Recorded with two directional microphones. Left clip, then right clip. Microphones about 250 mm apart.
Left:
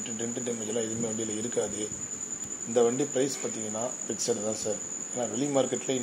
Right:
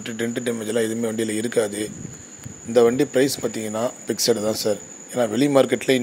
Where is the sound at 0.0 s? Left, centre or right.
Right.